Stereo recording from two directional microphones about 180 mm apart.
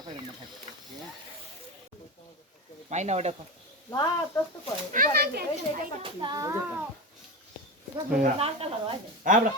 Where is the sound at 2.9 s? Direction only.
40° right (ahead or behind).